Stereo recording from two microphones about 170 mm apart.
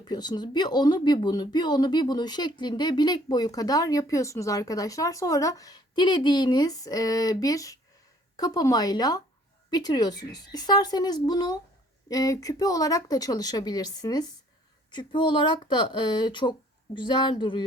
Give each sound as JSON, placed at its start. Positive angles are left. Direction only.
{"t": 0.0, "sound": "speech", "side_deg": 25}